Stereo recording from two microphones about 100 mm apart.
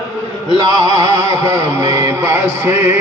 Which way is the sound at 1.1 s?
35° right (ahead or behind).